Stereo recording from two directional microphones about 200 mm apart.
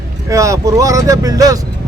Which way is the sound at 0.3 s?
15° right (ahead or behind).